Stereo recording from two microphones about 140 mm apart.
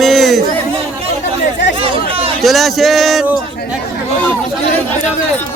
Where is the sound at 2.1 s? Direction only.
40° right (ahead or behind).